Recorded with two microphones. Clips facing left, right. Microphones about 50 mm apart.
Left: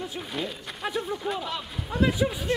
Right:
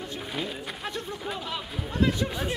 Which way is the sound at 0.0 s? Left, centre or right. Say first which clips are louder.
Left 1 dB; centre.